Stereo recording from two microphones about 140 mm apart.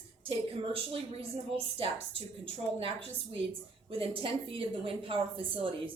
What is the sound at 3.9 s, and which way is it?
A woman's voice, 40° right (ahead or behind).